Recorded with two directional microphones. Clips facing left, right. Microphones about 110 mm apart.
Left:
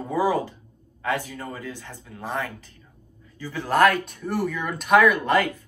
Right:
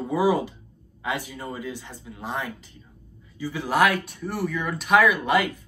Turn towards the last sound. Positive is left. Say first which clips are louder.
# left 1 dB
turn(degrees=-15)  # may be behind; listen again after turning